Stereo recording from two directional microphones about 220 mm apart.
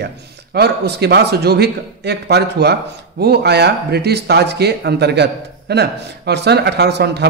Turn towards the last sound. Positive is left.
turn(degrees=-50)  # may be behind; listen again after turning